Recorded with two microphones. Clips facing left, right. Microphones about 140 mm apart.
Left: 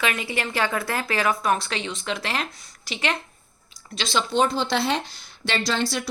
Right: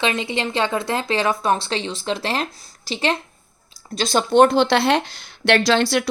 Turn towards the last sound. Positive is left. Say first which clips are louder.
# right 7 dB
turn(degrees=-75)  # may be behind; listen again after turning